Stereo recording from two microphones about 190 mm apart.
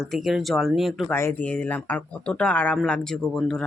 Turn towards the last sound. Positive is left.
turn(degrees=0)  # may be behind; listen again after turning